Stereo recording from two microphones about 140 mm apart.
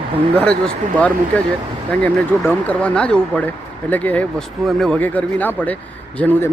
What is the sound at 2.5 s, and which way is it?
Speech, 10° left (ahead or behind).